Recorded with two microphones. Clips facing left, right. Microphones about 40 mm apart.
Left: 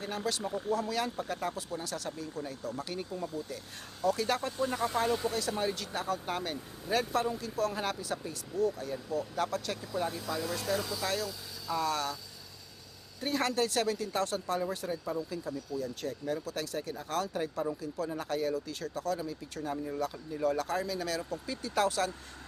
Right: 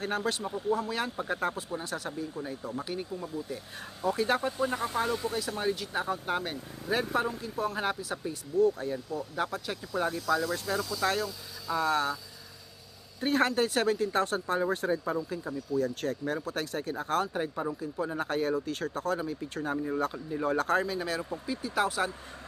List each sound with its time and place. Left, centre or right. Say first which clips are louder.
0.3 s speech: left 2 dB; right
0.7 s speech: right 2 dB; right
4.0 s speech: right 2 dB; right
8.5 s speech: right 6 dB; right
9.1 s speech: left 4 dB; centre
10.7 s speech: right 2 dB; right
13.2 s speech: right 4 dB; right
15.8 s speech: right 6 dB; right
17.3 s speech: right 1 dB; centre; by 19.8 s right
20.0 s speech: right 2 dB; right
21.2 s speech: right 3 dB; centre